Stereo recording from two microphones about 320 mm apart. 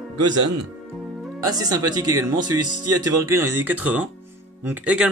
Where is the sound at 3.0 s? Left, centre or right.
Centre.